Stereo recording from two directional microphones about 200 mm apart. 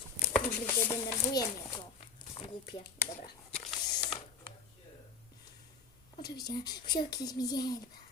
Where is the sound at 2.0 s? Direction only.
30° left (ahead or behind).